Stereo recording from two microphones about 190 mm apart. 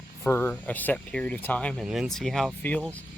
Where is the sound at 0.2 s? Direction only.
10° left (ahead or behind).